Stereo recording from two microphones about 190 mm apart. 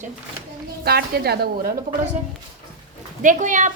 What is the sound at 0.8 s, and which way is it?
Speech, 55° right (ahead or behind).